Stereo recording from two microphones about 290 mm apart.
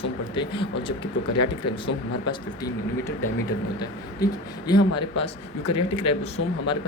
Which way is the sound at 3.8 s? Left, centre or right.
Centre.